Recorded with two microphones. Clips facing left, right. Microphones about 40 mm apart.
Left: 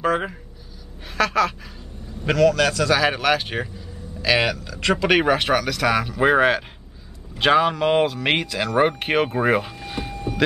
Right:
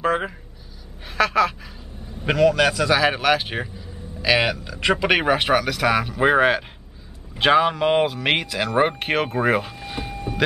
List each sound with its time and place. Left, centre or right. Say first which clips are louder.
0.0 s a woman's voice: even; centre